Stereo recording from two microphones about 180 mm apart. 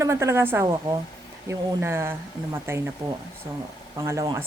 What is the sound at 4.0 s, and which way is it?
Speech, 20° right (ahead or behind).